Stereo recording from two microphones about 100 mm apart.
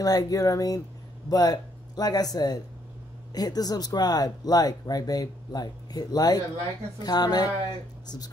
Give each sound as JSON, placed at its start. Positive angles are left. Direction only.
{"t": 0.0, "sound": "speech", "side_deg": 35}